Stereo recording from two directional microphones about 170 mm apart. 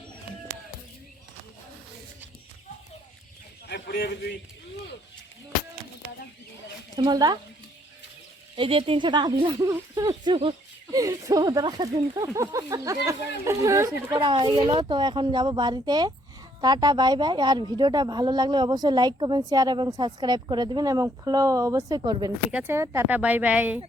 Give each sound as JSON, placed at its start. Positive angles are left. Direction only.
{"t": 3.8, "sound": "a man's voice", "side_deg": 70}
{"t": 6.9, "sound": "a woman's voice", "side_deg": -25}
{"t": 8.5, "sound": "a woman's voice", "side_deg": -30}
{"t": 14.2, "sound": "a woman's voice", "side_deg": -30}
{"t": 22.5, "sound": "speech", "side_deg": -10}